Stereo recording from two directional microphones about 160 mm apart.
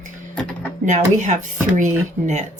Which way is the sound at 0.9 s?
50° right (ahead or behind).